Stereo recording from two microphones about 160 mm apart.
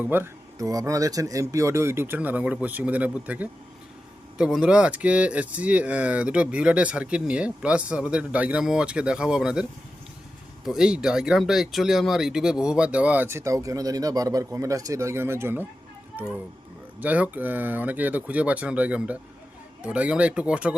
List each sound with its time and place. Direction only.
0.0 s speech: 15° right (ahead or behind)
10.7 s speech: 5° right (ahead or behind)
17.0 s speech: 10° right (ahead or behind)